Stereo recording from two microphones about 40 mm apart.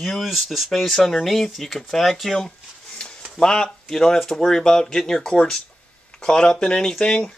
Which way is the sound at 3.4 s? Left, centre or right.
Centre.